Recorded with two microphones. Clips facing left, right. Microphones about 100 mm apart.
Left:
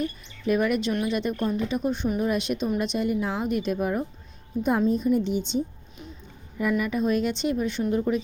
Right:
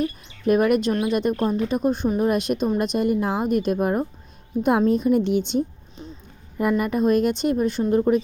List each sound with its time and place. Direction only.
0.4 s speech: 50° right (ahead or behind)
4.9 s speech: 75° right (ahead or behind)
6.6 s speech: 45° right (ahead or behind)